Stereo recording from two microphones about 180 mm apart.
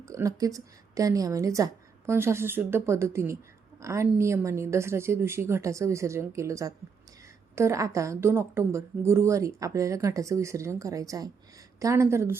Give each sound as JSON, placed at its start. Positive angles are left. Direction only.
{"t": 0.0, "sound": "a woman's voice", "side_deg": -15}